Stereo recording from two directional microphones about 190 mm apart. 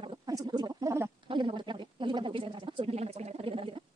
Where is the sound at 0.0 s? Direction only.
25° right (ahead or behind).